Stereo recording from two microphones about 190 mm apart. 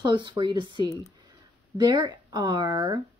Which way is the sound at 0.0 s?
25° right (ahead or behind).